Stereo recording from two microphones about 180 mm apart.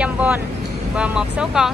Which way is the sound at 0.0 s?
10° right (ahead or behind).